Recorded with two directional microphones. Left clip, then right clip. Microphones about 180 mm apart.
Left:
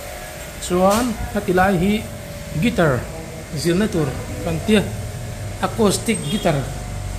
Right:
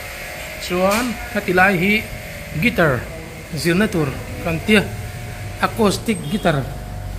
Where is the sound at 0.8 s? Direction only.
5° left (ahead or behind).